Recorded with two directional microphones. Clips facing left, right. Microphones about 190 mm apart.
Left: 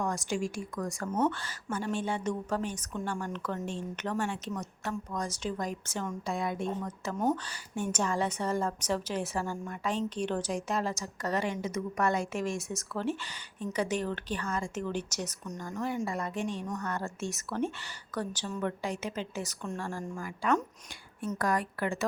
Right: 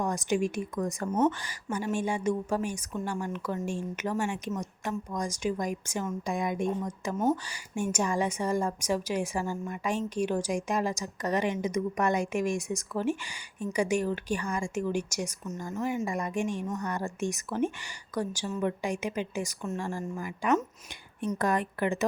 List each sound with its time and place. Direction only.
0.0 s a woman's voice: 20° right (ahead or behind)